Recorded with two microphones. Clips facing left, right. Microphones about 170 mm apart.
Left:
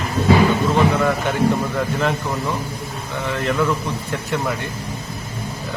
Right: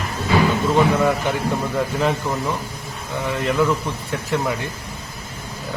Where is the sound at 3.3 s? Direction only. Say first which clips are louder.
Right 1 dB; 5° right (ahead or behind).